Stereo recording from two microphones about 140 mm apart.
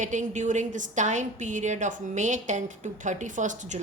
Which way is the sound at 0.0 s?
60° right (ahead or behind).